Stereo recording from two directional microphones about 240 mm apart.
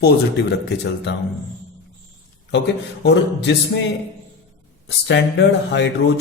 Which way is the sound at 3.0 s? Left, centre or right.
Left.